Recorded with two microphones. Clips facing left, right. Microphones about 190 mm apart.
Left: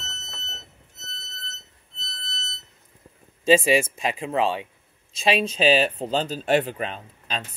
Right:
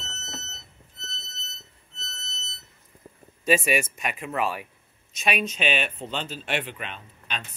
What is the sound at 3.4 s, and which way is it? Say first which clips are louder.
Speech: left 5 dB; 25° left (ahead or behind).